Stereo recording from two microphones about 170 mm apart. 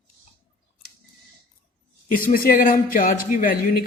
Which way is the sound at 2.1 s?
60° left (ahead or behind).